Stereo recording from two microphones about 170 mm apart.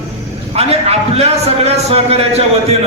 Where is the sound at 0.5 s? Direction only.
35° right (ahead or behind).